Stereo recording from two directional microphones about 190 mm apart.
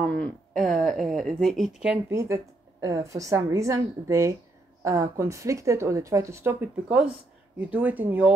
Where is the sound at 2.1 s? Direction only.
15° right (ahead or behind).